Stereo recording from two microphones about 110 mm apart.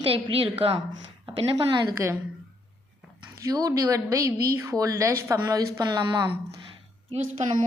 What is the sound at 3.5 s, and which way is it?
A woman's voice, 35° right (ahead or behind).